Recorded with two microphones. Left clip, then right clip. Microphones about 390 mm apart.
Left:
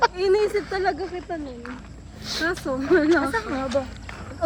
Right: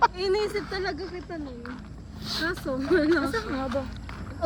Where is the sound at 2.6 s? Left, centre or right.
Left.